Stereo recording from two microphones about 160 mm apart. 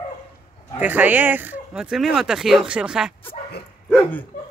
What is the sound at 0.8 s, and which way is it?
Speech, 10° right (ahead or behind).